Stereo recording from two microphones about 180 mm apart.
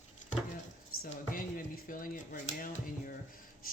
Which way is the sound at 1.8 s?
50° left (ahead or behind).